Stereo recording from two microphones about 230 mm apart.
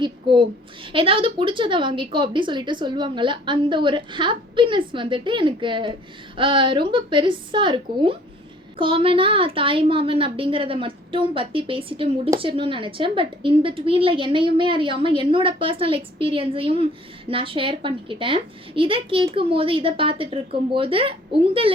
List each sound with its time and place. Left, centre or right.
0.0 s a woman's voice: right